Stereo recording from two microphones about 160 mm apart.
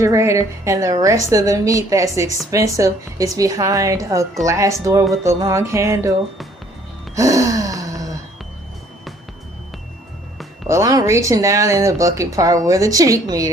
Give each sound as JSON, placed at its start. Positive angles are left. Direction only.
{"t": 0.0, "sound": "a woman's voice", "side_deg": -20}
{"t": 7.2, "sound": "gasp", "side_deg": -20}
{"t": 10.7, "sound": "a woman's voice", "side_deg": -20}